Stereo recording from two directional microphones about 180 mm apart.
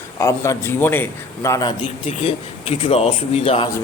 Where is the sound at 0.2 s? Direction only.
15° left (ahead or behind).